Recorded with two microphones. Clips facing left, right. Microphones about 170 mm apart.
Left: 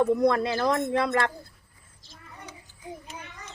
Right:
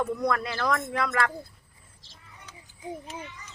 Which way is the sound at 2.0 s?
50° left (ahead or behind).